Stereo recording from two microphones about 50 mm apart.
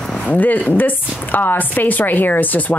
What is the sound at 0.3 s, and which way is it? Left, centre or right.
A woman's voice, left.